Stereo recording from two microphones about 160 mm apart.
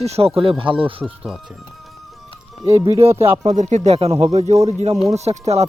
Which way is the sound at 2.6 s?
20° right (ahead or behind).